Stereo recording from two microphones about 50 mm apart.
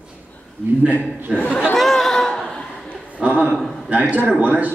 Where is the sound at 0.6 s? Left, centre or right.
Right.